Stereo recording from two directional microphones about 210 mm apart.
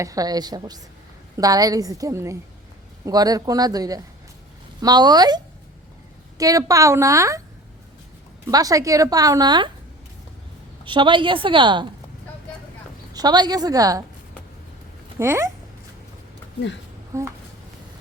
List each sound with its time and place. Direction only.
0.0 s a woman's voice: 15° right (ahead or behind)
8.4 s a woman's voice: 15° right (ahead or behind)
10.8 s a woman's voice: 25° right (ahead or behind)
13.1 s a woman's voice: 20° right (ahead or behind)
15.2 s a woman's voice: 10° right (ahead or behind)
17.1 s a woman's voice: 15° right (ahead or behind)